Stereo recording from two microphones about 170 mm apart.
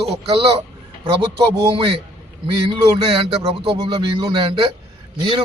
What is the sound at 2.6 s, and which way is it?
Speech, 30° right (ahead or behind).